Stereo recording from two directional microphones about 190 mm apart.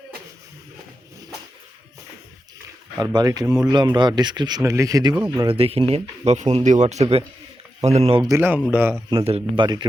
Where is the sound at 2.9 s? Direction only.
20° right (ahead or behind).